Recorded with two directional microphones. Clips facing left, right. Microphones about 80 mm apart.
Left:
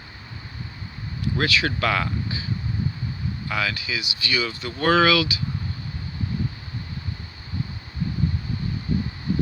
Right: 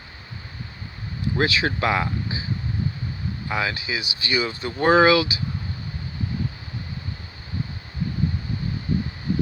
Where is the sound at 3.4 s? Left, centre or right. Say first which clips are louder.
Right 1 dB; right.